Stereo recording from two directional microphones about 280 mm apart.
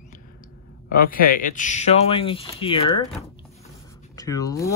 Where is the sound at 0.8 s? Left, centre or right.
Left.